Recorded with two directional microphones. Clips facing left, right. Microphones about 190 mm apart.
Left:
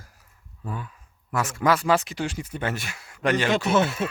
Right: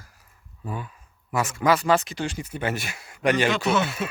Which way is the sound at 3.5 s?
50° left (ahead or behind).